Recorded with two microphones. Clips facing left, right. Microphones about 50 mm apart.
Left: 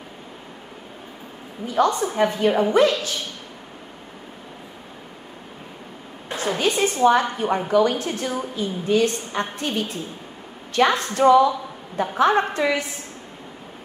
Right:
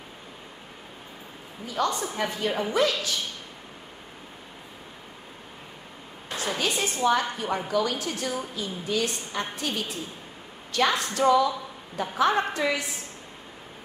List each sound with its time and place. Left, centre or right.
1.8 s a woman's voice: left
6.2 s a woman's voice: left